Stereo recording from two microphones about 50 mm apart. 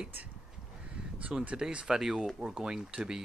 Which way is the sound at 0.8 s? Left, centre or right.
Right.